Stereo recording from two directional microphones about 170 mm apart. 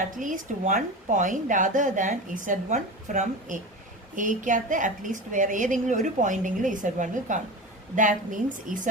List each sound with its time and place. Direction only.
0.2 s speech: 50° right (ahead or behind)